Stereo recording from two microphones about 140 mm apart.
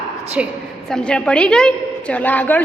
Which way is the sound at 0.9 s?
5° left (ahead or behind).